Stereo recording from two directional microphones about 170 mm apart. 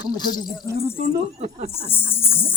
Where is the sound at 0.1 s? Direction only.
25° left (ahead or behind).